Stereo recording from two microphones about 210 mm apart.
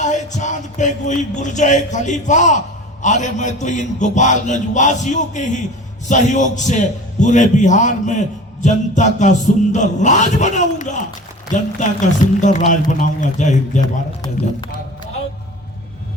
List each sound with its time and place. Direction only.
0.0 s a sound: 35° left (ahead or behind)
3.0 s a man's voice: 35° left (ahead or behind)
13.8 s a man's voice: 20° left (ahead or behind)